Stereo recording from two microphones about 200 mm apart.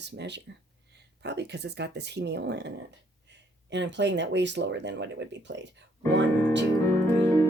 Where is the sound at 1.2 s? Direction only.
55° right (ahead or behind).